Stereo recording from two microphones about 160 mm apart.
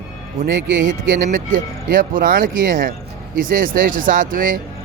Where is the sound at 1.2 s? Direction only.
55° right (ahead or behind).